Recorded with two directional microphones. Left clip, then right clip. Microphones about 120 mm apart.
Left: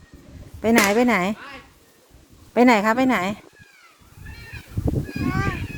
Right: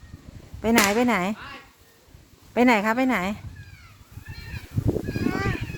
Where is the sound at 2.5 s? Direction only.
25° left (ahead or behind).